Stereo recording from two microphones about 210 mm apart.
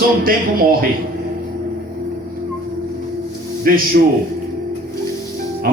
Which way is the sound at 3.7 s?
45° right (ahead or behind).